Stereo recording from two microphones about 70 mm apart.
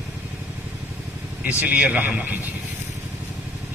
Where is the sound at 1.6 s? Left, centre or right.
Right.